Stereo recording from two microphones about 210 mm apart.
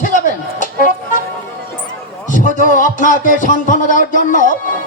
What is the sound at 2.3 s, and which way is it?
A man's voice, 40° left (ahead or behind).